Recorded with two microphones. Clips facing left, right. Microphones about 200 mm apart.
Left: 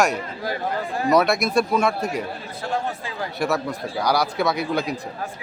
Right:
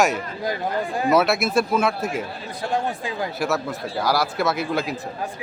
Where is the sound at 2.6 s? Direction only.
15° right (ahead or behind).